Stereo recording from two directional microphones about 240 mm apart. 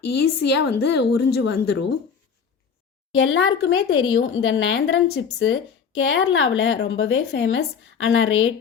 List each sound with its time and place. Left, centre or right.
0.0 s speech: left
3.2 s speech: left